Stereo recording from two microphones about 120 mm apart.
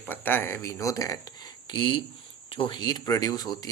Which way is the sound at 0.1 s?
15° left (ahead or behind).